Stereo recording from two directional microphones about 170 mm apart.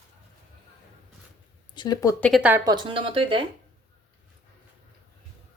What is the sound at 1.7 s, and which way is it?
Speech, 25° left (ahead or behind).